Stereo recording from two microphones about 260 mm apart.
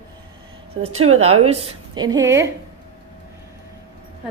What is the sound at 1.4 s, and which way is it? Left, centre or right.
A woman's voice, right.